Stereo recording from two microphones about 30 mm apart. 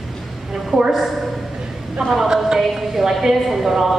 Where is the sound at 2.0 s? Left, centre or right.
Centre.